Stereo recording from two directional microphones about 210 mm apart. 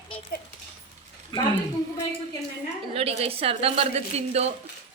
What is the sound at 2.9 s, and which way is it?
A woman's voice, 30° right (ahead or behind).